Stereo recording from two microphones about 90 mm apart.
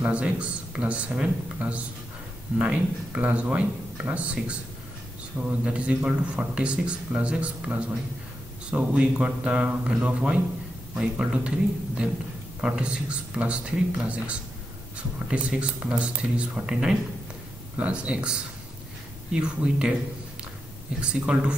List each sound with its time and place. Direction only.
0.0 s speech: 15° right (ahead or behind)
12.6 s speech: 10° right (ahead or behind)
19.3 s speech: 10° right (ahead or behind)
21.1 s speech: 10° right (ahead or behind)